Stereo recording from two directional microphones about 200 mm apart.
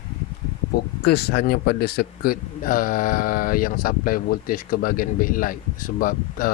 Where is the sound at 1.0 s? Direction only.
55° left (ahead or behind).